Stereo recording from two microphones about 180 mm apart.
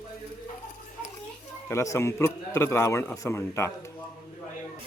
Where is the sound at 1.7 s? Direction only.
15° left (ahead or behind).